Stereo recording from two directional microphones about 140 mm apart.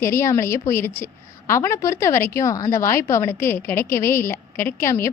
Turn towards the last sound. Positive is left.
turn(degrees=20)  # may be behind; listen again after turning